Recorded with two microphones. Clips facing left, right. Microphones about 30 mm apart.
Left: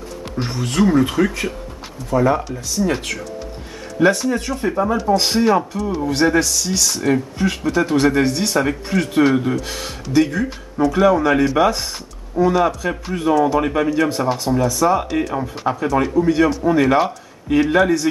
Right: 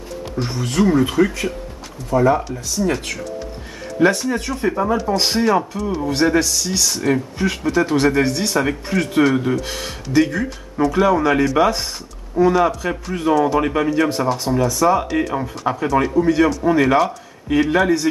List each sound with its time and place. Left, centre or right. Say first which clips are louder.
0.6 s speech: left 1 dB; centre
4.0 s speech: left 1 dB; centre
16.3 s a man's voice: left 1 dB; centre
16.6 s speech: even; centre